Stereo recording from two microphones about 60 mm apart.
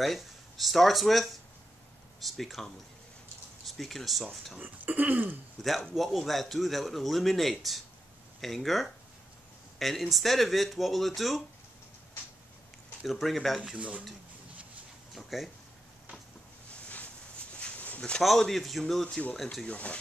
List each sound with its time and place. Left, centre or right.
0.0 s speech: centre
4.6 s a sound: right
5.6 s speech: centre
13.0 s speech: centre
13.7 s speech: right
15.1 s speech: centre
17.6 s a sound: left
18.2 s speech: centre
19.7 s speech: left